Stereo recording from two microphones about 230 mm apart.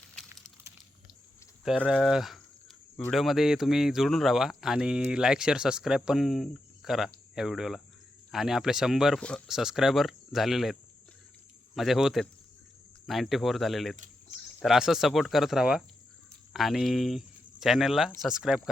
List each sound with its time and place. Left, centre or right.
1.6 s speech: centre